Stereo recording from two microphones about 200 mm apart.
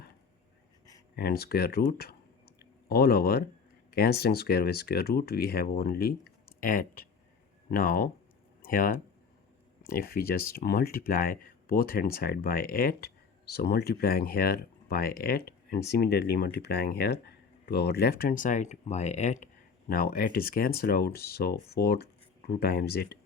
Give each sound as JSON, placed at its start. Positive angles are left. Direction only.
{"t": 1.1, "sound": "speech", "side_deg": 50}
{"t": 2.6, "sound": "a sound", "side_deg": 50}
{"t": 3.9, "sound": "speech", "side_deg": 50}
{"t": 19.9, "sound": "speech", "side_deg": 45}